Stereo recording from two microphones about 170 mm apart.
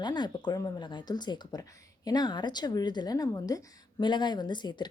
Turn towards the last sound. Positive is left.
turn(degrees=25)  # may be behind; listen again after turning